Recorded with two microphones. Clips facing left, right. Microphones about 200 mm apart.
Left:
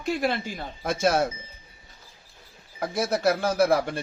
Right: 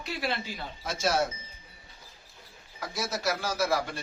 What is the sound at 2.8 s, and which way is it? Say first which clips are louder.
A man's voice: left 8 dB; 55° left (ahead or behind).